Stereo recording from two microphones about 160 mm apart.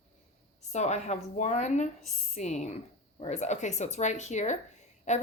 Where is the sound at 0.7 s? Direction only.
45° left (ahead or behind).